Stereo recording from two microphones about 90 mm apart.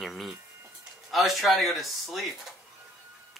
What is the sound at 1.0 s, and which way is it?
Speech, centre (ahead or behind).